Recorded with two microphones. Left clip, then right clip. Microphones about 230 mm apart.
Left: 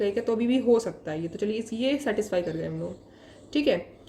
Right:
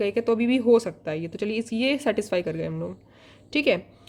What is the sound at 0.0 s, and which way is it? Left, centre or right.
A woman's voice, right.